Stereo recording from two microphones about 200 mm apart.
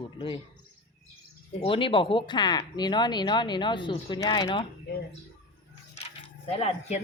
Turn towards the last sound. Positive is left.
turn(degrees=30)  # may be behind; listen again after turning